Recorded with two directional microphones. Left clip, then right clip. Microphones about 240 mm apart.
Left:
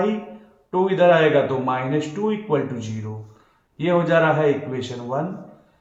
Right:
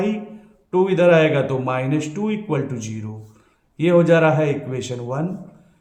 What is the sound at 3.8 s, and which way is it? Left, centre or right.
Speech, right.